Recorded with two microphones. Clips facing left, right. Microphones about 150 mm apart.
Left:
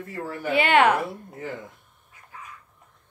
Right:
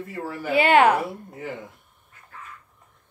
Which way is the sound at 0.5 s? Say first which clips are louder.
Right 2 dB; 35° right (ahead or behind).